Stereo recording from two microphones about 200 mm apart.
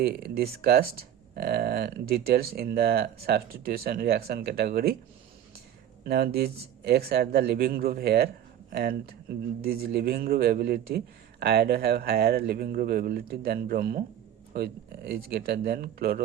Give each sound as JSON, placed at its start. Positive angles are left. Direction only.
{"t": 0.0, "sound": "a man's voice", "side_deg": -50}
{"t": 6.1, "sound": "a man's voice", "side_deg": -50}